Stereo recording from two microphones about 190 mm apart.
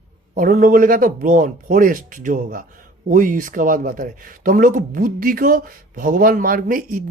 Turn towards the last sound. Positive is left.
turn(degrees=-50)  # may be behind; listen again after turning